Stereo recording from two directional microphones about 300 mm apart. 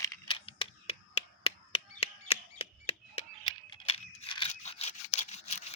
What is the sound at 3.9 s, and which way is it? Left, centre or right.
Scissors, centre.